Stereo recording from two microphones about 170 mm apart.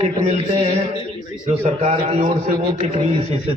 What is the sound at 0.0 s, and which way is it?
A man's voice, 35° right (ahead or behind).